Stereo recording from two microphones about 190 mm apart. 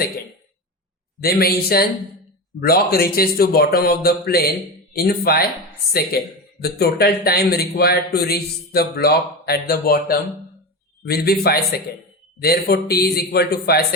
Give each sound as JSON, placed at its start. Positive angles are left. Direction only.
{"t": 1.2, "sound": "speech", "side_deg": 50}